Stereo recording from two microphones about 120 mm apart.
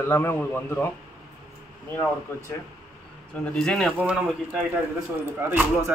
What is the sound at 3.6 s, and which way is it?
Speech, 5° left (ahead or behind).